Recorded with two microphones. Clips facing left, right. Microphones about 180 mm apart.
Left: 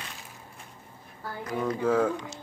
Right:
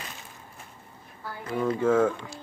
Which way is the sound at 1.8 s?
15° left (ahead or behind).